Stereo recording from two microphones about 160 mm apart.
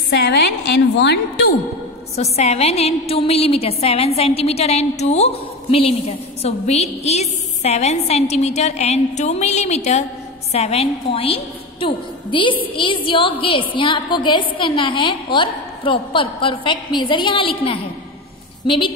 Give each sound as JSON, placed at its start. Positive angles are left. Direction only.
{"t": 0.1, "sound": "a woman's voice", "side_deg": 90}
{"t": 2.1, "sound": "a woman's voice", "side_deg": 40}